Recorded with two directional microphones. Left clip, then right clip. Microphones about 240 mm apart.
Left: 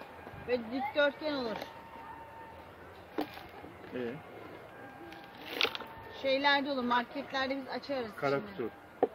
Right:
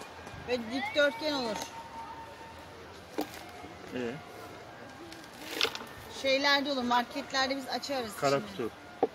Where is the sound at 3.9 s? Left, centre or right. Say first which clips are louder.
Right 2 dB; centre.